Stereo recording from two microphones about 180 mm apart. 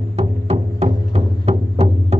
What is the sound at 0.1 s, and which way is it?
Music, 35° right (ahead or behind).